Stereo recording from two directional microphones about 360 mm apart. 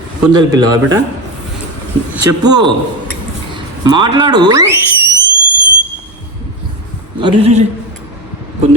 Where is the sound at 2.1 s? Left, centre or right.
Centre.